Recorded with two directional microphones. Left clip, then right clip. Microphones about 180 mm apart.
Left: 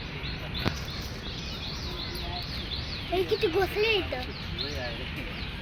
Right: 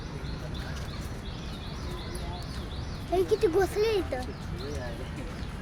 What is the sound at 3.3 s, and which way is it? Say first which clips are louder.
Speech: right 1 dB; 40° right (ahead or behind).